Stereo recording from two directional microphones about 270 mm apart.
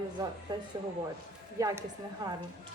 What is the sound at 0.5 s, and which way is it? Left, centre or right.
Speech, centre.